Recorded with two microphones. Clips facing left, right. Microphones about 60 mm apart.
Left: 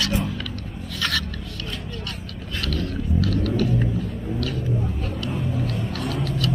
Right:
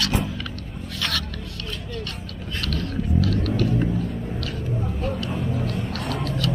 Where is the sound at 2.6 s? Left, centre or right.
Right.